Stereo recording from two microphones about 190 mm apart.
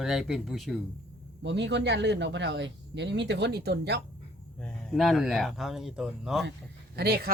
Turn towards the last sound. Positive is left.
turn(degrees=-60)  # may be behind; listen again after turning